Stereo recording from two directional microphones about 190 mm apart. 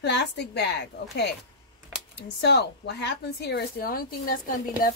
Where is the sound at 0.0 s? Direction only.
60° left (ahead or behind).